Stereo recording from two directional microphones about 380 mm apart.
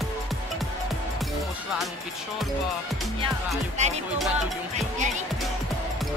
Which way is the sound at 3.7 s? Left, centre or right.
Centre.